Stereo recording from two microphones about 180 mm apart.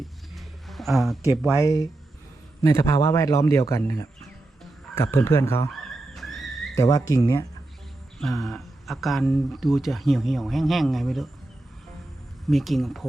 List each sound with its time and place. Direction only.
0.0 s a sound: centre (ahead or behind)
2.6 s a man's voice: 15° left (ahead or behind)
5.8 s a sound: centre (ahead or behind)
6.7 s speech: 20° left (ahead or behind)
8.2 s speech: centre (ahead or behind)
12.5 s speech: centre (ahead or behind)